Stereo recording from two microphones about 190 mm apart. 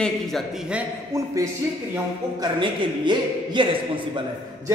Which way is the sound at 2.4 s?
25° right (ahead or behind).